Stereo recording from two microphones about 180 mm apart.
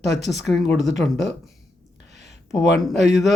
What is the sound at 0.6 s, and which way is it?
Speech, centre (ahead or behind).